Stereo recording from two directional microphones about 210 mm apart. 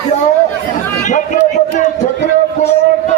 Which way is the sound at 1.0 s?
35° left (ahead or behind).